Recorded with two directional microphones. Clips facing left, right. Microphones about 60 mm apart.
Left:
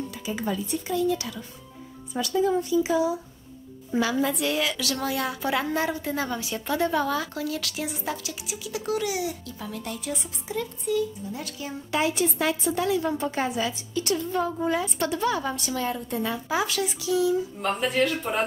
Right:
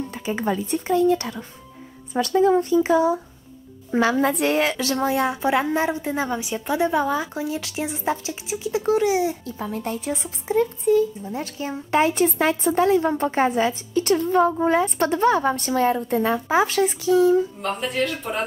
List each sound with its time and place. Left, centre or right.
0.1 s a woman's voice: right
17.6 s speech: centre